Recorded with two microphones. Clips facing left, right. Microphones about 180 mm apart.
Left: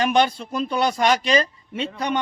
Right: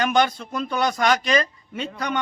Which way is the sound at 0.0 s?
30° left (ahead or behind).